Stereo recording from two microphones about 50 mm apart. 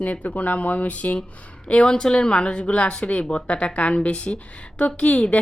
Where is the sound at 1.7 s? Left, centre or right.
Centre.